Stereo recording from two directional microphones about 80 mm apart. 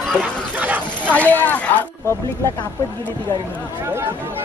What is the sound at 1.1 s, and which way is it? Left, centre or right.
Speech, centre.